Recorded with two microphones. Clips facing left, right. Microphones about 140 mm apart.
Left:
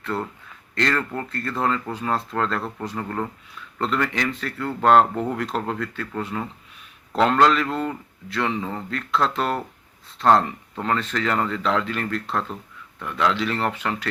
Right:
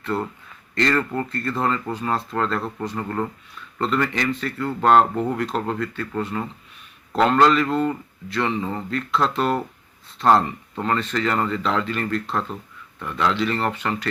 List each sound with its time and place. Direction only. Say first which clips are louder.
0.0 s speech: right 2 dB; centre (ahead or behind)